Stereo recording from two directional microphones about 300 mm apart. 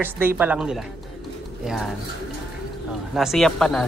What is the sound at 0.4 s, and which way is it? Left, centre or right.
Speech, centre.